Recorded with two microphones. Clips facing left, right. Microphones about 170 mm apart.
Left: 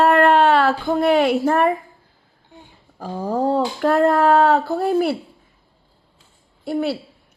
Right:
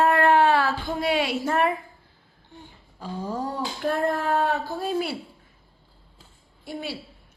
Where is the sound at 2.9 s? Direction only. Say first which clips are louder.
Left 7 dB; 45° left (ahead or behind).